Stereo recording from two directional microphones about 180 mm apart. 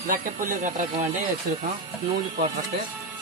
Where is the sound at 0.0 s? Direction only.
50° right (ahead or behind).